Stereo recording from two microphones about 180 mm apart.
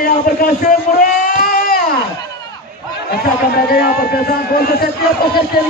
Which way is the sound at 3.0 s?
60° left (ahead or behind).